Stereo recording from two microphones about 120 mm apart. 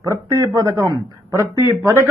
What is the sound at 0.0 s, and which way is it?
Speech, 25° right (ahead or behind).